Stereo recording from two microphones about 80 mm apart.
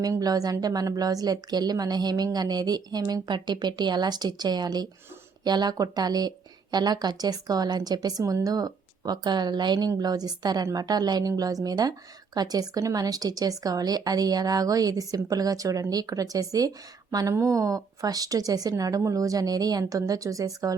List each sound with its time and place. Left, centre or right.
0.0 s a woman's voice: right